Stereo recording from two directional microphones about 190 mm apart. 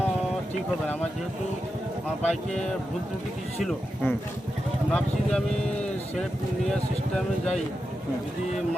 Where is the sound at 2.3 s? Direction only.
Centre (ahead or behind).